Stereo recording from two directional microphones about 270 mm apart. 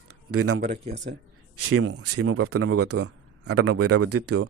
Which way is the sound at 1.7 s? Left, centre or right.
Right.